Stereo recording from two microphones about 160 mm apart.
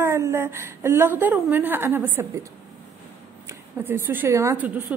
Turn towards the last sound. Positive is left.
turn(degrees=-10)  # may be behind; listen again after turning